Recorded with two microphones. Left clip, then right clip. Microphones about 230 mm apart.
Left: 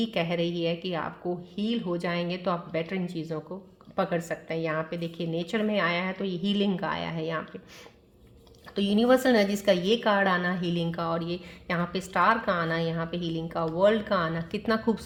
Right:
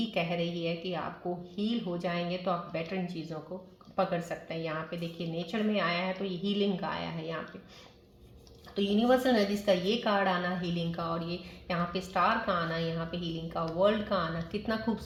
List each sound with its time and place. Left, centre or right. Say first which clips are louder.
0.0 s a woman's voice: left 4 dB; left
8.7 s a woman's voice: left 4 dB; left